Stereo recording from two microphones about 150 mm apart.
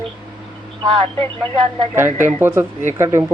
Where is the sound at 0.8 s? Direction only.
35° right (ahead or behind).